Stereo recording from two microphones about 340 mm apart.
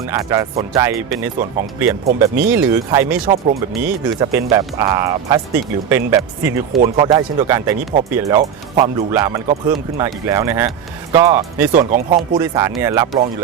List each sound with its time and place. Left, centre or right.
0.1 s speech: centre
3.2 s speech: right
3.7 s speech: centre
11.7 s speech: right
12.4 s speech: centre